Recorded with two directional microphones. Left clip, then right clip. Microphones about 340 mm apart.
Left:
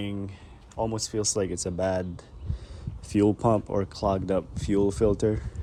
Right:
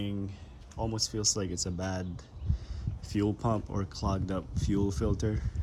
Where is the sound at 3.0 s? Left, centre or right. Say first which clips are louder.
Left 8 dB; centre.